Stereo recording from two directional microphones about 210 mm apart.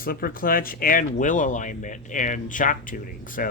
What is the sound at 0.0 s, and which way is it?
Speech, 45° left (ahead or behind).